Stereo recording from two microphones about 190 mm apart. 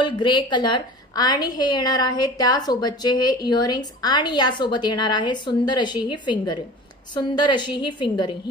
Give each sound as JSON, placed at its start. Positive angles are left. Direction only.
{"t": 0.0, "sound": "a woman's voice", "side_deg": 25}